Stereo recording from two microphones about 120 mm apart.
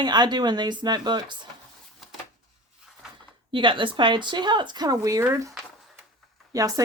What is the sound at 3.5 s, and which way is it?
Speech, 40° right (ahead or behind).